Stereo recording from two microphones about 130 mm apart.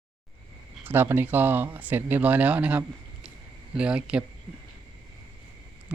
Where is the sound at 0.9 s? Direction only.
15° right (ahead or behind).